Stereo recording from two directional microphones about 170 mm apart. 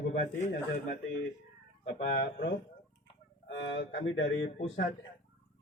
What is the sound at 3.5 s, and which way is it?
Speech, 90° left.